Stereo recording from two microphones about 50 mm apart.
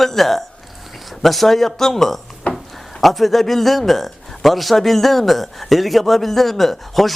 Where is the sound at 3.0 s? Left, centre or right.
Centre.